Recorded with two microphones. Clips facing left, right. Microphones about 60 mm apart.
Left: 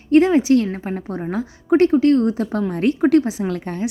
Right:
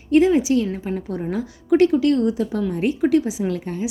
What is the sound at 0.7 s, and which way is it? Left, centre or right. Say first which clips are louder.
A woman's voice: even; left.